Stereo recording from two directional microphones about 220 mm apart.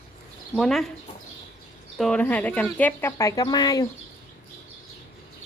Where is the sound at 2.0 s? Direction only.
5° left (ahead or behind).